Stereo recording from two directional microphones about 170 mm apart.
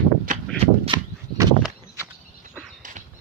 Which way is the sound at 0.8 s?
25° right (ahead or behind).